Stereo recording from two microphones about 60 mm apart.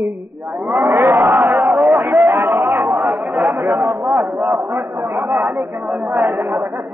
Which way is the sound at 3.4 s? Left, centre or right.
Right.